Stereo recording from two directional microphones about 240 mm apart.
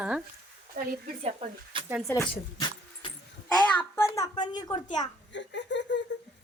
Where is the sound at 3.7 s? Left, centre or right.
Centre.